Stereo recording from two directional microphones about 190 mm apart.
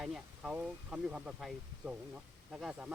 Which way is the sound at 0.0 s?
Centre (ahead or behind).